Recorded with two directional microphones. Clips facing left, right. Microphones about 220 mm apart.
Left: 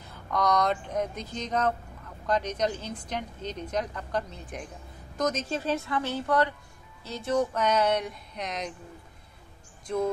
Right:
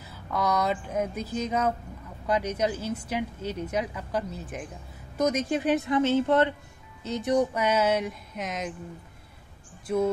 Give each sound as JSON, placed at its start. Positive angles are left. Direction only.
{"t": 0.0, "sound": "a woman's voice", "side_deg": -5}
{"t": 9.9, "sound": "a woman's voice", "side_deg": -5}